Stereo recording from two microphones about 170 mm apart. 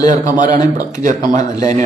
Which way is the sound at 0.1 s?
50° right (ahead or behind).